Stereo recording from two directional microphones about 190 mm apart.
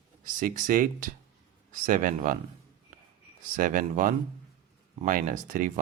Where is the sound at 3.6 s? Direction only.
45° right (ahead or behind).